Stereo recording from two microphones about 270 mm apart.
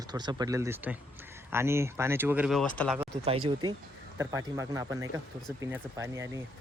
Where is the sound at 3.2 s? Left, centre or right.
Right.